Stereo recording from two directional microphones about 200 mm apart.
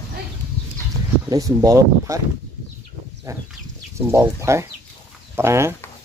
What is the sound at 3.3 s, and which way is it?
Speech, 15° right (ahead or behind).